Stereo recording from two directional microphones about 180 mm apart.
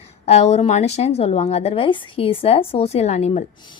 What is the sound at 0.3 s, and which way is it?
A woman's voice, 35° left (ahead or behind).